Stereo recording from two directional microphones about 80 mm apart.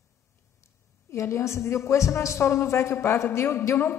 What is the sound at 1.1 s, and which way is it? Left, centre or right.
A woman's voice, left.